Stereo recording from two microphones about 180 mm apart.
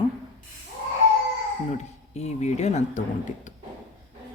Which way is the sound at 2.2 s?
40° left (ahead or behind).